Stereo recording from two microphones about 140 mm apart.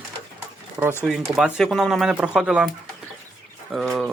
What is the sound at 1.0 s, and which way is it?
Speech, centre (ahead or behind).